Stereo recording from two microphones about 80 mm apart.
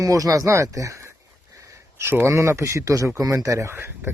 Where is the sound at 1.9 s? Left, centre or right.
Right.